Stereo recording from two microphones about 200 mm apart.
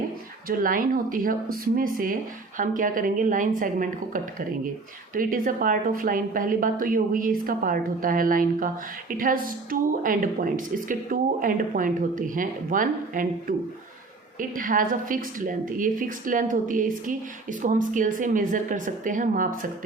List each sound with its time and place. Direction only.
0.4 s a woman's voice: 45° right (ahead or behind)